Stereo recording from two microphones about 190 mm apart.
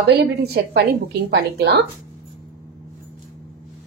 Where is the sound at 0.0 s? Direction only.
60° right (ahead or behind).